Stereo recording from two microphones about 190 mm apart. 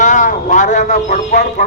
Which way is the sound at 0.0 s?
40° left (ahead or behind).